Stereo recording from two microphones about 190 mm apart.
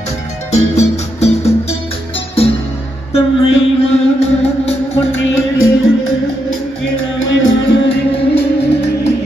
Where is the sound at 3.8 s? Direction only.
35° left (ahead or behind).